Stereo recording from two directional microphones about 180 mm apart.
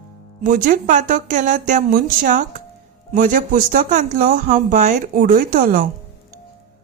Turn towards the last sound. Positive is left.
turn(degrees=-50)  # may be behind; listen again after turning